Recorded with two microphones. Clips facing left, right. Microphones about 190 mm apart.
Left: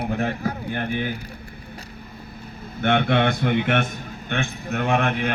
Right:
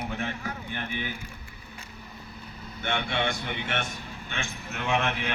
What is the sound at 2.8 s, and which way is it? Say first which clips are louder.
A man's voice: left 10 dB; 55° left (ahead or behind).